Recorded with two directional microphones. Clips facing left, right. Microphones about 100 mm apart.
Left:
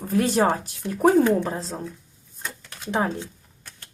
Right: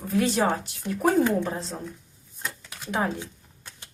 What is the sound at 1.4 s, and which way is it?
Speech, 30° left (ahead or behind).